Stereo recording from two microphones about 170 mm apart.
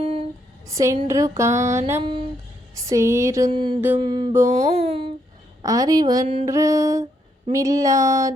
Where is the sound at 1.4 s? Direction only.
15° right (ahead or behind).